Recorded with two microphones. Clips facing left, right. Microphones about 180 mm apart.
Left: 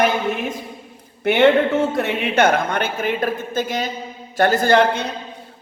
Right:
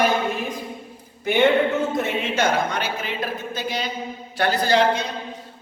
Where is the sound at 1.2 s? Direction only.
70° left (ahead or behind).